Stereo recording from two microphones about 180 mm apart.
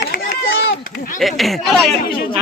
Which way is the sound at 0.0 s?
65° left (ahead or behind).